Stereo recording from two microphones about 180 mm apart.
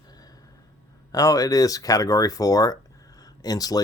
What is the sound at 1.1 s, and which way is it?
Speech, 20° left (ahead or behind).